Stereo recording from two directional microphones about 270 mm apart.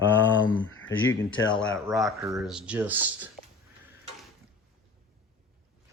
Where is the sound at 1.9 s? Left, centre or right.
Centre.